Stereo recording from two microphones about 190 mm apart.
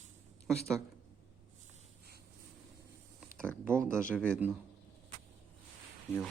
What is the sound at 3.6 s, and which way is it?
Speech, 15° right (ahead or behind).